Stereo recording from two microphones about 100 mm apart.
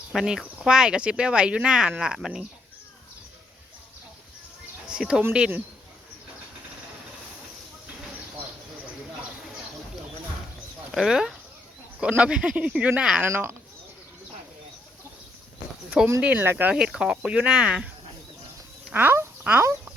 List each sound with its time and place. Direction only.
0.1 s speech: centre (ahead or behind)
4.9 s speech: 5° right (ahead or behind)
10.9 s speech: 5° right (ahead or behind)
13.3 s speech: 25° right (ahead or behind)
16.2 s speech: 20° right (ahead or behind)
16.7 s speech: 5° right (ahead or behind)